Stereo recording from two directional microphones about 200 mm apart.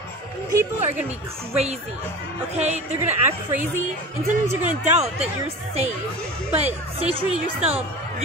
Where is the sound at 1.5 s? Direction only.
30° right (ahead or behind).